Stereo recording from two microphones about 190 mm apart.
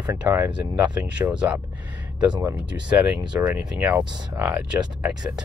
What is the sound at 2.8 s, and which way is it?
Speech, 5° right (ahead or behind).